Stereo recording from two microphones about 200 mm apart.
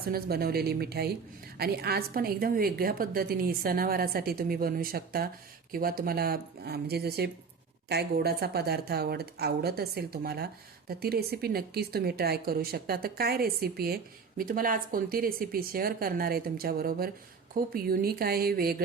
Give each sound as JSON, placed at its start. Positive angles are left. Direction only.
{"t": 0.0, "sound": "a woman's voice", "side_deg": -50}